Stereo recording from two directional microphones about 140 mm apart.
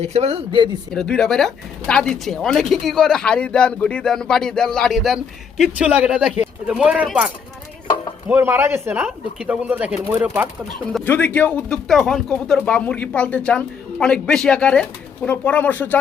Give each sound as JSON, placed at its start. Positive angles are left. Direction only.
{"t": 0.0, "sound": "speech", "side_deg": -50}
{"t": 0.9, "sound": "speech", "side_deg": 5}
{"t": 8.3, "sound": "speech", "side_deg": -15}
{"t": 11.0, "sound": "speech", "side_deg": 15}